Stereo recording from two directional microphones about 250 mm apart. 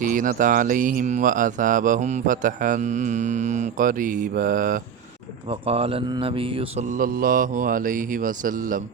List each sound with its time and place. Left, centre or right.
0.0 s speech: right
5.5 s speech: right